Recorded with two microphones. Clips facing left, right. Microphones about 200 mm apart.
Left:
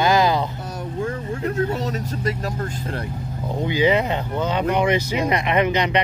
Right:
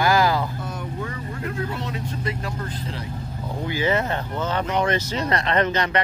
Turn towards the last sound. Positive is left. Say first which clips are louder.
# left 2 dB
turn(degrees=15)  # may be behind; listen again after turning